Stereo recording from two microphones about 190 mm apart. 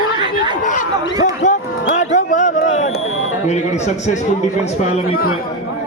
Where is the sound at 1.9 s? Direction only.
40° left (ahead or behind).